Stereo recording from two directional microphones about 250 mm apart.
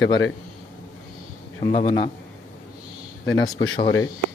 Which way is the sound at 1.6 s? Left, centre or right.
Left.